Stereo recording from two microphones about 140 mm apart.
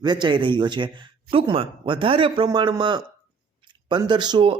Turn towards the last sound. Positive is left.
turn(degrees=-35)  # may be behind; listen again after turning